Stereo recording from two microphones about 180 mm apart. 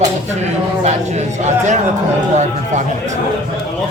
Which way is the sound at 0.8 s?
40° right (ahead or behind).